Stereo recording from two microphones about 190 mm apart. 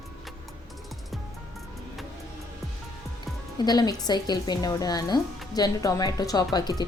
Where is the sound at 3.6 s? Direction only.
20° left (ahead or behind).